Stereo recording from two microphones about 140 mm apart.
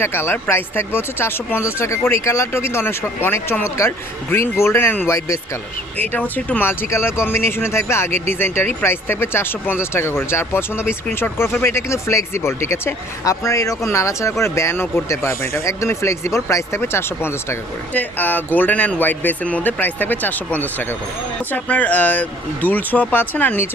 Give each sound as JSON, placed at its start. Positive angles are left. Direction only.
{"t": 0.0, "sound": "speech", "side_deg": 15}